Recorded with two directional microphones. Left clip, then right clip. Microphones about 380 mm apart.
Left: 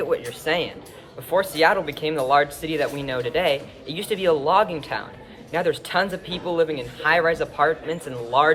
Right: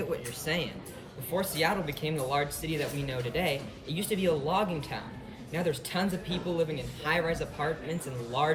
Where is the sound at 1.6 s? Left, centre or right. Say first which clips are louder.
Left 10 dB; centre.